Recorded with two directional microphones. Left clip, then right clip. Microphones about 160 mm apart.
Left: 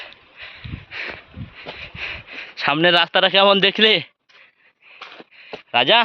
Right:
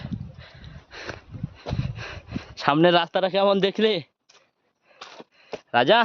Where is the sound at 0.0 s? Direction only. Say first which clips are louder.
Left 3 dB; 15° right (ahead or behind).